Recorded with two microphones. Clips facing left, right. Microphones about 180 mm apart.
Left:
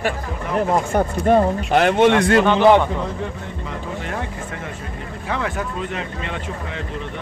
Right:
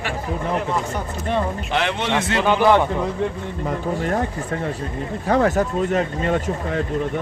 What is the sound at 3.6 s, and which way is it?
Speech, 40° right (ahead or behind).